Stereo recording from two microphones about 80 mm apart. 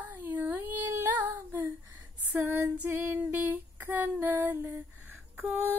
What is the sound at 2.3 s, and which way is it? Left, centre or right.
Female singing, right.